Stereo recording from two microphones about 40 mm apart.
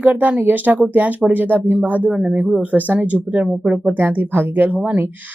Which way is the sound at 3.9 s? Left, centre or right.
Right.